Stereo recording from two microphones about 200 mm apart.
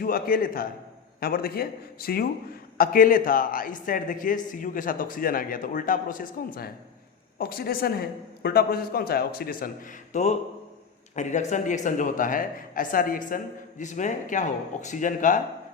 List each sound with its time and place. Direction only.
0.0 s a man's voice: 45° left (ahead or behind)
10.1 s speech: 35° left (ahead or behind)